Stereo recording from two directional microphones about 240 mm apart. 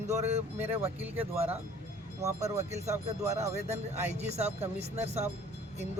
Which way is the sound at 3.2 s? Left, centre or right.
Right.